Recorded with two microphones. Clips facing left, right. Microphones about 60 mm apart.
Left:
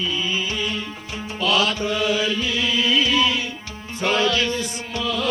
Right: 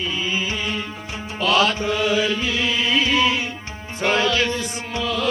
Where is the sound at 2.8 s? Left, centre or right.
Right.